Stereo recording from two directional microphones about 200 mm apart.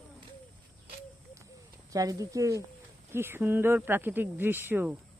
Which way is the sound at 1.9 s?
15° right (ahead or behind).